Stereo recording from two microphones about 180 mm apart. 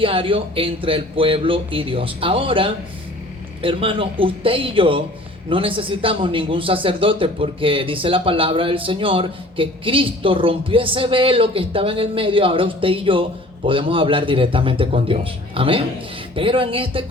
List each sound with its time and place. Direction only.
0.0 s a man's voice: 30° right (ahead or behind)